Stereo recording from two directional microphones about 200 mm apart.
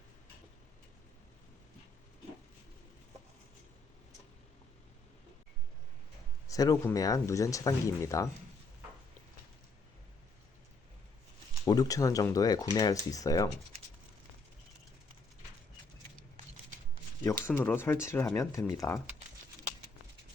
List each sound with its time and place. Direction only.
6.5 s speech: 15° left (ahead or behind)
11.6 s speech: 15° left (ahead or behind)
17.2 s speech: 15° left (ahead or behind)